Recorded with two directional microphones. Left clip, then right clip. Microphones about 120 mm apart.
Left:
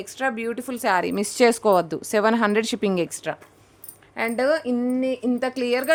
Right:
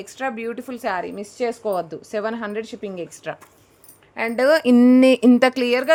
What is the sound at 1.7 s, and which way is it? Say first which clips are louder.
Speech: left 5 dB; 50° left (ahead or behind).